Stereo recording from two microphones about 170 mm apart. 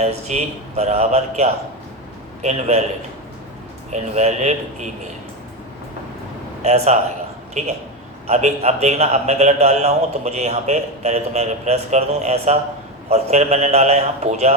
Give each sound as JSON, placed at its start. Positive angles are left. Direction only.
{"t": 0.0, "sound": "a man's voice", "side_deg": -40}
{"t": 3.9, "sound": "a man's voice", "side_deg": -40}
{"t": 6.6, "sound": "a man's voice", "side_deg": -40}